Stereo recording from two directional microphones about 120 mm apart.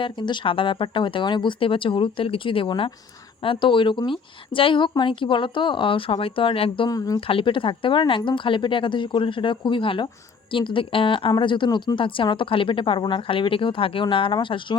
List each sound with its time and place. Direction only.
0.0 s a woman's voice: 40° left (ahead or behind)
6.9 s speech: 30° left (ahead or behind)
7.2 s a woman's voice: 50° left (ahead or behind)